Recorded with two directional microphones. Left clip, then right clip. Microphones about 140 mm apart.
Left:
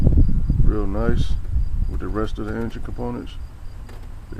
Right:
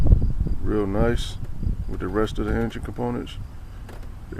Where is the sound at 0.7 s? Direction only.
15° right (ahead or behind).